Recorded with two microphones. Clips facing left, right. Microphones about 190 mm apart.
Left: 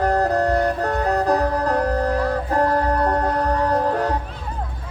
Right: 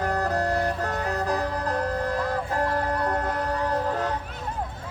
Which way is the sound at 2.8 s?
40° left (ahead or behind).